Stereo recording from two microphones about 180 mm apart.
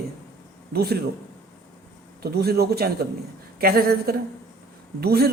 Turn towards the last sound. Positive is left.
turn(degrees=-60)  # may be behind; listen again after turning